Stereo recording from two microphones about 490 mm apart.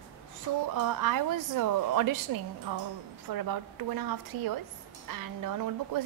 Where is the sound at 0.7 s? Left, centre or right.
Right.